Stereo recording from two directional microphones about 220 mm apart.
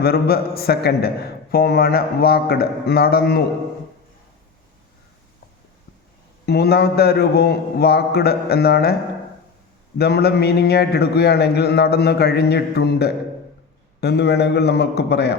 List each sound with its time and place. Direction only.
0.0 s a man's voice: 45° left (ahead or behind)
6.4 s a man's voice: 45° left (ahead or behind)
10.0 s a man's voice: 45° left (ahead or behind)